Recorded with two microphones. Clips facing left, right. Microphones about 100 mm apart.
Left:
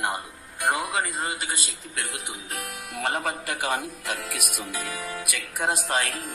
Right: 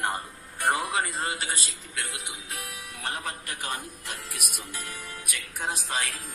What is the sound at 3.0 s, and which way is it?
A man's voice, 70° left (ahead or behind).